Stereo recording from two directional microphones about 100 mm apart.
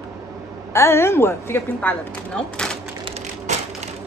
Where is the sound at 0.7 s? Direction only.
25° left (ahead or behind).